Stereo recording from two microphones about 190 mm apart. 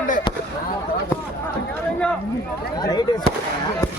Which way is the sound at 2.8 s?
20° left (ahead or behind).